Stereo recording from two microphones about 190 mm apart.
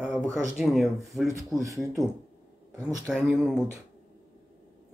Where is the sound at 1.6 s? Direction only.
15° right (ahead or behind).